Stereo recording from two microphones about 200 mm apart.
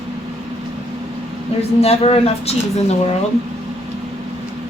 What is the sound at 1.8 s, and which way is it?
A woman's voice, 30° left (ahead or behind).